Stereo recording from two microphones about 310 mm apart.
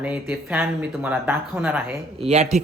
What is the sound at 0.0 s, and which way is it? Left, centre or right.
Speech, centre.